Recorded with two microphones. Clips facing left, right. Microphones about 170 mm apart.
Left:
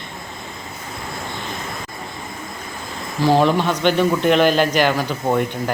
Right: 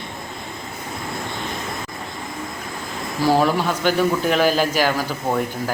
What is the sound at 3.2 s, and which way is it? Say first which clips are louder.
A man's voice: left 2 dB; 10° right (ahead or behind).